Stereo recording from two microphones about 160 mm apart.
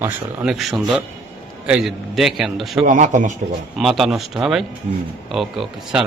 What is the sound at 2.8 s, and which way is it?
Speech, 50° right (ahead or behind).